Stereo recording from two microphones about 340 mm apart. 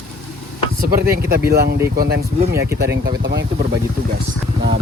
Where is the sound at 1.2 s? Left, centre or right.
Right.